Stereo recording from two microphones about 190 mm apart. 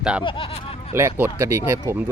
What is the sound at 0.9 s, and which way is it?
Speech, 15° right (ahead or behind).